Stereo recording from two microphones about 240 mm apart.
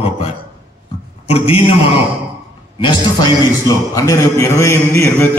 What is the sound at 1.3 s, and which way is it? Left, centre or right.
A man's voice, left.